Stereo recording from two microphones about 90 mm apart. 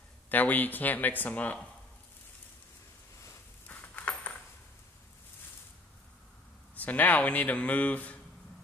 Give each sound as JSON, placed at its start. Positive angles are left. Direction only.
{"t": 0.3, "sound": "speech", "side_deg": 20}
{"t": 3.6, "sound": "a sound", "side_deg": 20}
{"t": 6.7, "sound": "speech", "side_deg": 15}